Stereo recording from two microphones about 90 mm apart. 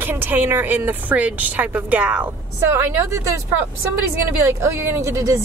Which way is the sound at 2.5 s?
30° right (ahead or behind).